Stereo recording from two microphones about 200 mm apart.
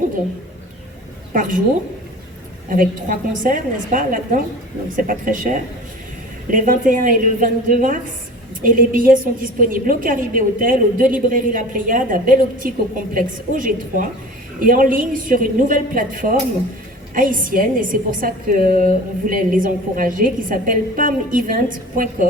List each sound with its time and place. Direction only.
1.3 s a woman's voice: 40° right (ahead or behind)
2.6 s a woman's voice: 40° right (ahead or behind)